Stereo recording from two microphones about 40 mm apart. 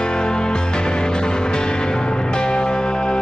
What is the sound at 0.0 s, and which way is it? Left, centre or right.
Music, left.